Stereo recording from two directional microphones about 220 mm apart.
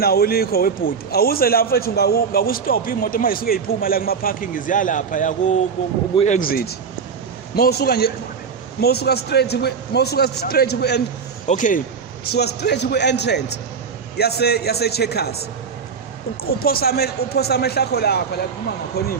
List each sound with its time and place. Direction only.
0.0 s a man's voice: 45° left (ahead or behind)
11.4 s speech: 35° left (ahead or behind)
12.3 s a man's voice: 50° left (ahead or behind)
16.4 s a man's voice: 45° left (ahead or behind)